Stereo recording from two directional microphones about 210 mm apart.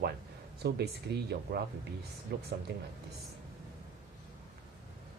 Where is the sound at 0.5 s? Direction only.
50° right (ahead or behind).